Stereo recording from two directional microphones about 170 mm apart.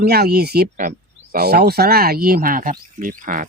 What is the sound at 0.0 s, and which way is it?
Speech, 70° right (ahead or behind).